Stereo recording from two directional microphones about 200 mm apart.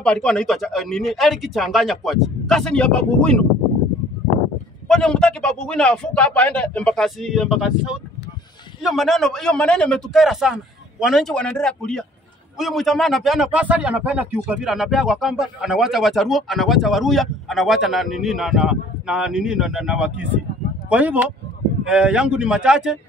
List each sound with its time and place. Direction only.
0.0 s speech: 5° left (ahead or behind)
4.8 s speech: 5° left (ahead or behind)